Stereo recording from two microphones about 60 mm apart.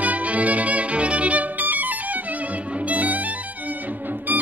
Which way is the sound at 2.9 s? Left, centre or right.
Right.